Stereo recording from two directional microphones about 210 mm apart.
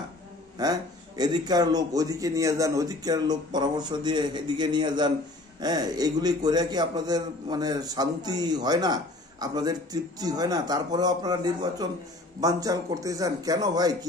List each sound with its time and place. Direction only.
0.6 s a man's voice: 20° right (ahead or behind)